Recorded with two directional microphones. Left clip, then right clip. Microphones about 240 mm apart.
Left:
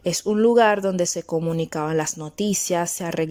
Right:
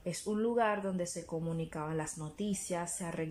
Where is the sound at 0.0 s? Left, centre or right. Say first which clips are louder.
Left 15 dB; left.